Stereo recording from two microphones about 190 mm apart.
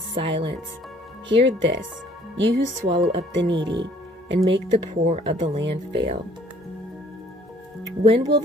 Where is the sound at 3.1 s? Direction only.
75° right (ahead or behind).